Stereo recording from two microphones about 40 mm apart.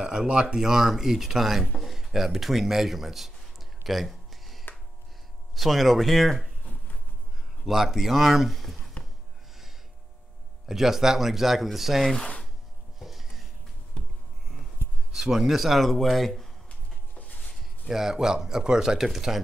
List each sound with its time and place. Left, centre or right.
0.0 s speech: right; by 1.7 s centre
1.8 s a sound: centre
5.6 s speech: centre
6.6 s a sound: left
7.6 s speech: centre
10.7 s speech: centre
13.0 s music: centre
15.1 s speech: centre
17.1 s a sound: left
17.8 s speech: centre
18.9 s speech: centre